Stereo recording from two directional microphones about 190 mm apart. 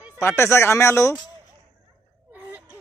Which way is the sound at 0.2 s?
15° left (ahead or behind).